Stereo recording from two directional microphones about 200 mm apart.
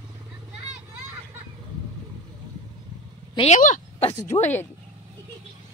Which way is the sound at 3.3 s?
35° left (ahead or behind).